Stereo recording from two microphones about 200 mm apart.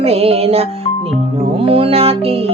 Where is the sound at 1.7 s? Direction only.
30° right (ahead or behind).